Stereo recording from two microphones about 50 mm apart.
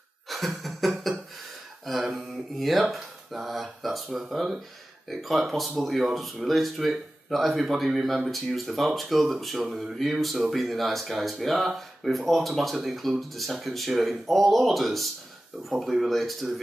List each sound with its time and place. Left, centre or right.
0.3 s a sound: centre
1.9 s speech: centre
10.2 s speech: centre